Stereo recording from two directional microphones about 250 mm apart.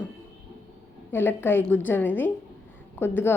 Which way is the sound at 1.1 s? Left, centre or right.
Centre.